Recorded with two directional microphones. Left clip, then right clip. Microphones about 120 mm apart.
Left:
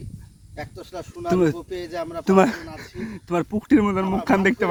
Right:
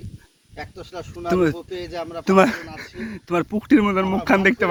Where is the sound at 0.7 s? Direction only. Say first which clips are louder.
Right 1 dB; 40° left (ahead or behind).